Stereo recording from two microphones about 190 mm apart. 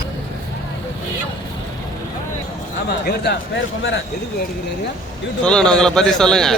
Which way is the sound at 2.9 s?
60° left (ahead or behind).